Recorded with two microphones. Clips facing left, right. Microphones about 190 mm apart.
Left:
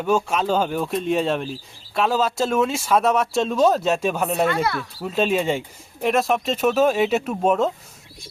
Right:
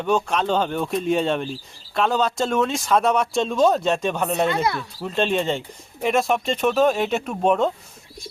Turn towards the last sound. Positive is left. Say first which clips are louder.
# even
turn(degrees=0)  # may be behind; listen again after turning